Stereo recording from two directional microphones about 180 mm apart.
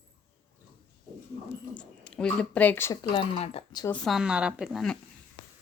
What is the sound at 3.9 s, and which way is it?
A woman's voice, centre (ahead or behind).